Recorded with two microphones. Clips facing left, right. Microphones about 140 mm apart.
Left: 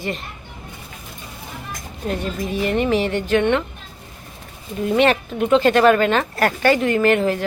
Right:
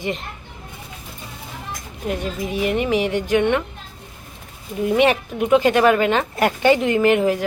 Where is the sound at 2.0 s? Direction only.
10° right (ahead or behind).